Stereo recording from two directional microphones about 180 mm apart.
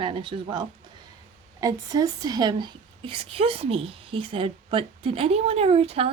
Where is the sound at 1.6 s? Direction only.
20° right (ahead or behind).